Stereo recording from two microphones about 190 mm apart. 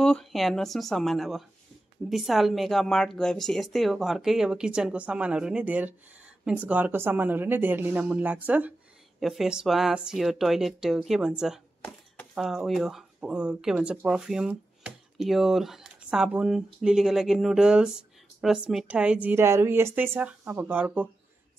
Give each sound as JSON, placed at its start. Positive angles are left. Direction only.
{"t": 0.0, "sound": "a woman's voice", "side_deg": 0}